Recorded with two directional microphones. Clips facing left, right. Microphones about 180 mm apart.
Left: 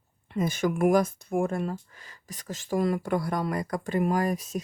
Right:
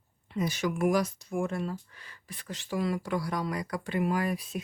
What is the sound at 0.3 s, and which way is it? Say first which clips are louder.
Speech: left 4 dB; 50° left (ahead or behind).